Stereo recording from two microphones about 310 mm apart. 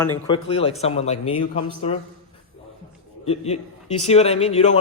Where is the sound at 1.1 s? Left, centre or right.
Left.